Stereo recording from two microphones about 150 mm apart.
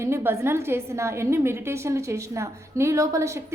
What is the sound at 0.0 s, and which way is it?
A woman's voice, 15° right (ahead or behind).